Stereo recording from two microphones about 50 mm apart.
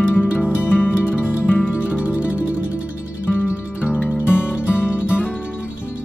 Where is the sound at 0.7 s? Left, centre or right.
Left.